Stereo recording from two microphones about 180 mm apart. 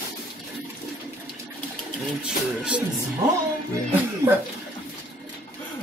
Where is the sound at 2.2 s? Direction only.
5° right (ahead or behind).